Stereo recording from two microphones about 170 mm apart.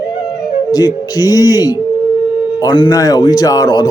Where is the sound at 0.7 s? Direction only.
20° left (ahead or behind).